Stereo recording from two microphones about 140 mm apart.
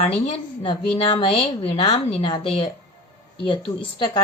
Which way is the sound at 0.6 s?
40° left (ahead or behind).